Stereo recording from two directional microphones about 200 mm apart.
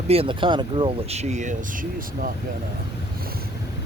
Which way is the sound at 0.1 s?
25° right (ahead or behind).